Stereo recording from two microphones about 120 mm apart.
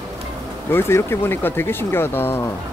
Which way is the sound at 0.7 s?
20° left (ahead or behind).